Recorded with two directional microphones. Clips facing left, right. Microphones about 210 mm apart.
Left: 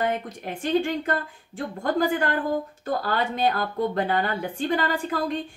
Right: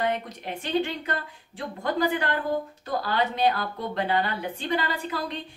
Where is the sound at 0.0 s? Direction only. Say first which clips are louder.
Left 1 dB; 45° left (ahead or behind).